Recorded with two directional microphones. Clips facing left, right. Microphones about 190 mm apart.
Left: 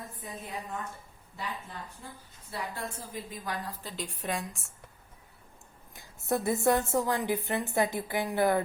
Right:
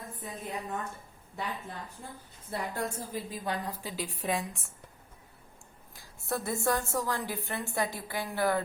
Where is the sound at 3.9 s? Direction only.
5° right (ahead or behind).